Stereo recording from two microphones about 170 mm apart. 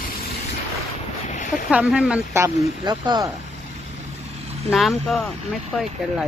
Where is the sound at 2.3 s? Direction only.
15° right (ahead or behind).